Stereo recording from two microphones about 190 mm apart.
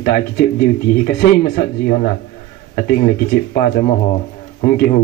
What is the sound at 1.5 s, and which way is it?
Speech, 45° left (ahead or behind).